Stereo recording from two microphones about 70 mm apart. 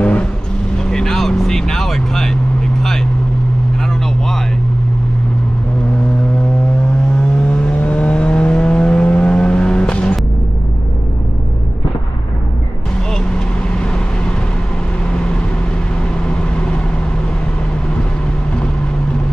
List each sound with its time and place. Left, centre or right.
0.0 s vehicle: centre
7.3 s vehicle: centre
13.1 s vehicle: centre
16.3 s vehicle: centre